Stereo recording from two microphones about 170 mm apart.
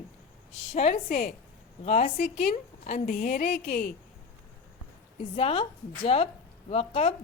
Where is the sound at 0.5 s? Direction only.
35° left (ahead or behind).